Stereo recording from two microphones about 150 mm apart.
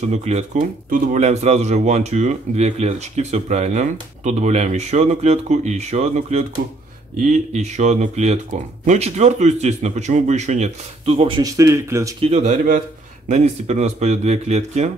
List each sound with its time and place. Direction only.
0.1 s speech: 50° right (ahead or behind)
0.8 s speech: 70° right (ahead or behind)
1.2 s speech: 45° right (ahead or behind)
11.4 s speech: 20° right (ahead or behind)
12.2 s speech: 45° right (ahead or behind)